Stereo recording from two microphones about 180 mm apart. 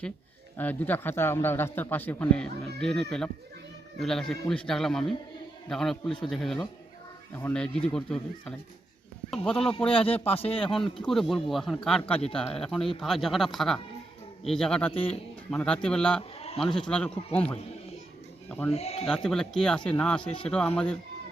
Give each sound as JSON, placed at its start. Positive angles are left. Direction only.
{"t": 0.5, "sound": "a man's voice", "side_deg": 10}
{"t": 10.2, "sound": "speech", "side_deg": 30}
{"t": 10.5, "sound": "speech", "side_deg": 5}
{"t": 18.4, "sound": "speech", "side_deg": 5}
{"t": 18.7, "sound": "speech", "side_deg": 35}
{"t": 19.0, "sound": "speech", "side_deg": 5}